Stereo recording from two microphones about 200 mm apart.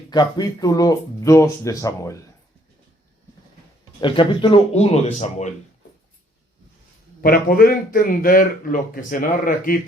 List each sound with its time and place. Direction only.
0.1 s speech: 20° left (ahead or behind)
4.0 s speech: 25° left (ahead or behind)
7.2 s a man's voice: 45° left (ahead or behind)